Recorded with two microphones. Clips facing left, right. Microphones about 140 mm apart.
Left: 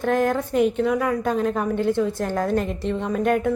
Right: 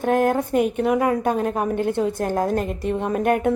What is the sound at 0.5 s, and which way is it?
A woman's voice, 55° right (ahead or behind).